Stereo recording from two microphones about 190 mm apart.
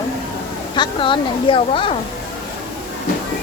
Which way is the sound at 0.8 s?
25° left (ahead or behind).